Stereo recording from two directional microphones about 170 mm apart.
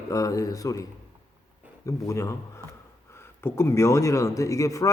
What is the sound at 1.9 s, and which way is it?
Speech, 15° left (ahead or behind).